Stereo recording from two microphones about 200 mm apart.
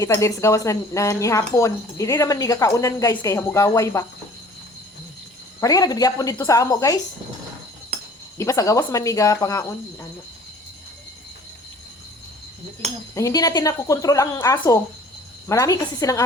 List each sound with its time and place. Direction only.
0.0 s speech: 15° left (ahead or behind)
5.5 s speech: 15° left (ahead or behind)
8.4 s speech: 15° left (ahead or behind)
13.1 s speech: 15° left (ahead or behind)